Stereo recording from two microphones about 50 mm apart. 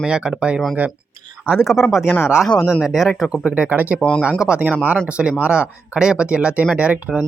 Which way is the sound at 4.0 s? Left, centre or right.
Centre.